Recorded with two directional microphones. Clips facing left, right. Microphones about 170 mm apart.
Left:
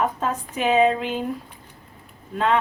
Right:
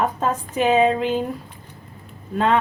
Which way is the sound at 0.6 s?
40° right (ahead or behind).